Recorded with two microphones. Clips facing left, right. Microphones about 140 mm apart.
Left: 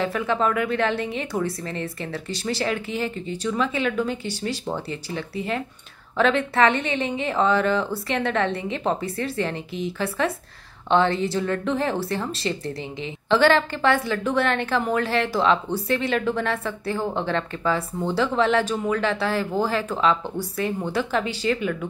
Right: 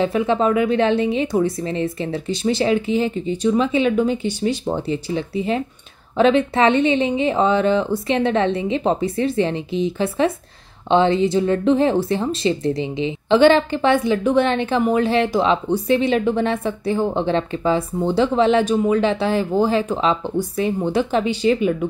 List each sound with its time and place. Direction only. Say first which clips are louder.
0.0 s speech: right 5 dB; 20° right (ahead or behind)